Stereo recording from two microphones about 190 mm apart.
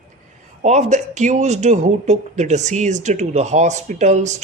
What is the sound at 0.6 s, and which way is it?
Speech, 35° right (ahead or behind).